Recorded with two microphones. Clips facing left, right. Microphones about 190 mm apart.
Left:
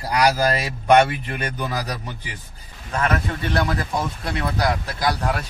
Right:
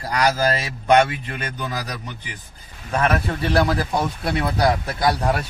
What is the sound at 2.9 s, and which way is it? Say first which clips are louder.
Speech: right 2 dB; 30° right (ahead or behind).